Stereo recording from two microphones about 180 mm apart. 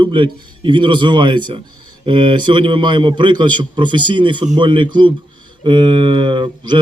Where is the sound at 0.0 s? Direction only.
30° right (ahead or behind).